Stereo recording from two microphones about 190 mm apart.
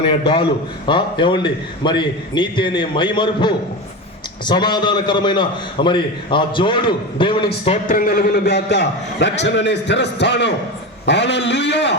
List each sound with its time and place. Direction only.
0.0 s a man's voice: 30° left (ahead or behind)
7.9 s a man's voice: 50° left (ahead or behind); by 11.9 s 65° left (ahead or behind)